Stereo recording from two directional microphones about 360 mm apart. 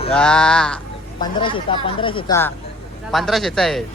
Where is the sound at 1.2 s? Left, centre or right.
Centre.